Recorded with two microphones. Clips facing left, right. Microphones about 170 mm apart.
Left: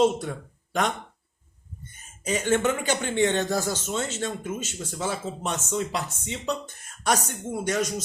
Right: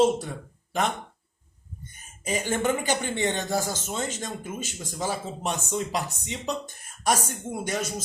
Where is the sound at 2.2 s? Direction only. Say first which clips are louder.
Left 2 dB; 10° right (ahead or behind).